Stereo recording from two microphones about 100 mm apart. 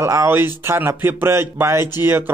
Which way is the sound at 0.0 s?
30° right (ahead or behind).